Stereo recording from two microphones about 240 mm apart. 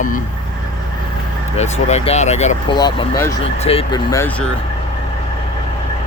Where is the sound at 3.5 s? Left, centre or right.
Left; by 4.5 s centre.